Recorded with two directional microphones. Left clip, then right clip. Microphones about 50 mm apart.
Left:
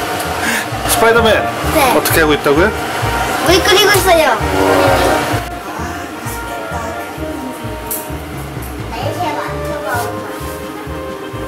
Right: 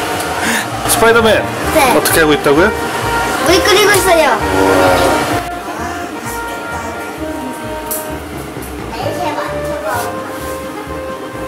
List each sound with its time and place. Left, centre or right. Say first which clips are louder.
0.4 s a sound: right 1 dB; right
1.0 s speech: right 1 dB; centre
1.7 s speech: right 2 dB; centre
2.0 s speech: right 1 dB; centre
4.4 s speech: right 2 dB; left
4.6 s train: right 1 dB; centre